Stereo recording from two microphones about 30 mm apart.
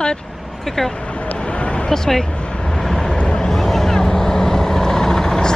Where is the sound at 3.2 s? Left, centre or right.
Left.